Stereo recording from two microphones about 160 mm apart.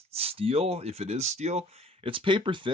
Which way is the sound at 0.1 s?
40° right (ahead or behind).